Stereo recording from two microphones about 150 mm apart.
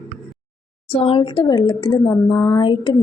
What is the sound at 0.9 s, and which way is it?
A woman's voice, 40° left (ahead or behind).